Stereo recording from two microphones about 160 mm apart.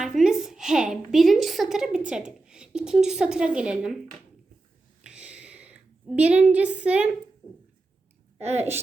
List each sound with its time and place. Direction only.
0.0 s a woman's voice: centre (ahead or behind)
5.0 s a sound: 5° right (ahead or behind)
8.4 s a woman's voice: 40° right (ahead or behind)